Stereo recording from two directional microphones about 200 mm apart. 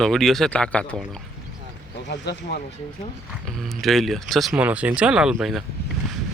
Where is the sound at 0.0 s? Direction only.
Centre (ahead or behind).